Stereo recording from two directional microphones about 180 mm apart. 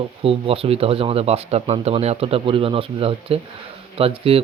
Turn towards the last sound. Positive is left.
turn(degrees=-30)  # may be behind; listen again after turning